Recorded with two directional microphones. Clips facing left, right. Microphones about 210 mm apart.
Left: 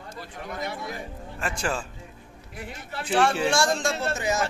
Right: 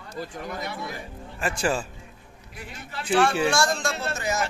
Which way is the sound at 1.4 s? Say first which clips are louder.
Right 4 dB; 10° right (ahead or behind).